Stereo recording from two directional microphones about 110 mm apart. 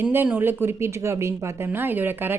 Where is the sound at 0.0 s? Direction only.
15° right (ahead or behind).